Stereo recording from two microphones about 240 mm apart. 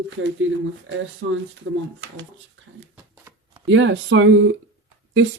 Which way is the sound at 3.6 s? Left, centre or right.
Right.